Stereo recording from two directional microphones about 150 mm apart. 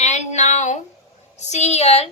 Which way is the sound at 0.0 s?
50° left (ahead or behind).